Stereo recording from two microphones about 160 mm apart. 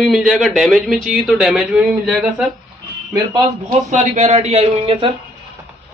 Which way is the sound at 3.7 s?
45° right (ahead or behind).